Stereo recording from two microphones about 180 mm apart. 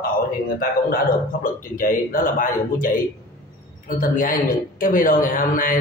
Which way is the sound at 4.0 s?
50° left (ahead or behind).